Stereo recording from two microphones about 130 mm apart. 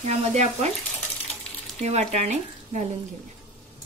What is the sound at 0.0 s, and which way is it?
Speech, 60° right (ahead or behind).